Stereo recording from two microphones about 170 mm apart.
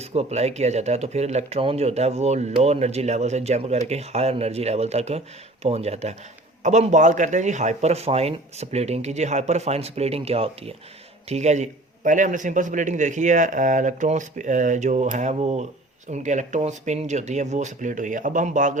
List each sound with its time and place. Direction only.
0.0 s a man's voice: 35° right (ahead or behind)